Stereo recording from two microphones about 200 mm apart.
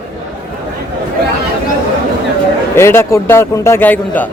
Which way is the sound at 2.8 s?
15° left (ahead or behind).